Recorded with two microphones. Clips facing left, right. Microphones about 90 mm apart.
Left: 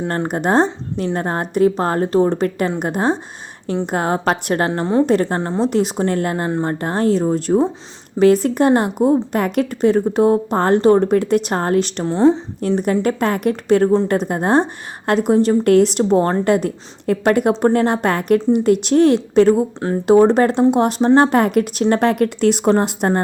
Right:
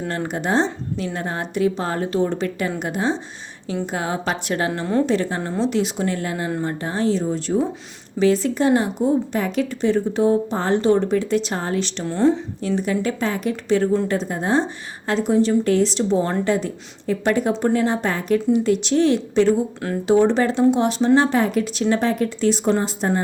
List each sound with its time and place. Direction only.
0.3 s a woman's voice: 50° left (ahead or behind)
4.7 s a woman's voice: 30° left (ahead or behind)
5.0 s a woman's voice: 50° left (ahead or behind)
5.4 s a woman's voice: 40° left (ahead or behind)
12.0 s a woman's voice: 30° left (ahead or behind)
12.6 s a woman's voice: 50° left (ahead or behind)